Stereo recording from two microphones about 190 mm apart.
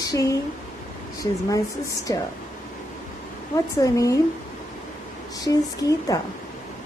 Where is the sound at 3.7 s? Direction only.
15° left (ahead or behind).